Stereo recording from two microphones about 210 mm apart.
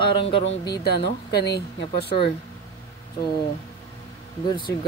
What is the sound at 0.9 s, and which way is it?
Speech, 50° left (ahead or behind).